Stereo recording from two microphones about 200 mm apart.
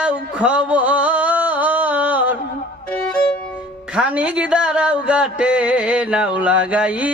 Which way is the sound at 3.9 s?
5° right (ahead or behind).